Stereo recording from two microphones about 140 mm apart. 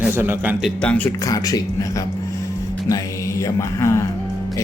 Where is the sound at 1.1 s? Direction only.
25° left (ahead or behind).